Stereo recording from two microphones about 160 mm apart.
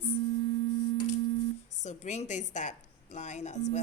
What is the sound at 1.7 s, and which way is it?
A woman's voice, 50° left (ahead or behind).